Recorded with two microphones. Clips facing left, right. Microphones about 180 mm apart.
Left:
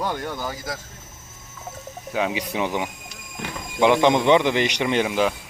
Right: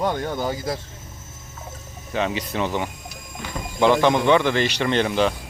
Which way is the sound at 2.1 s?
10° left (ahead or behind).